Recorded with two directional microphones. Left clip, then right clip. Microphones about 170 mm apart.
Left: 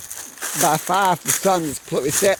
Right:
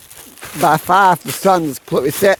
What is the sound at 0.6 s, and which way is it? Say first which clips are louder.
Speech: right 7 dB; 50° right (ahead or behind).